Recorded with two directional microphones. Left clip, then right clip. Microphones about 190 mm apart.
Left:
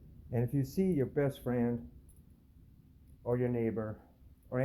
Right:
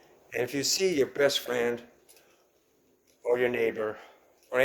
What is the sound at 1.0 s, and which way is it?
Speech, 20° right (ahead or behind).